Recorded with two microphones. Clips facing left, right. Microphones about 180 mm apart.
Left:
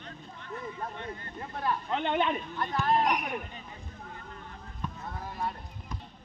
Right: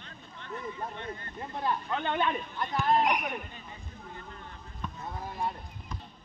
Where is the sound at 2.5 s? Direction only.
15° right (ahead or behind).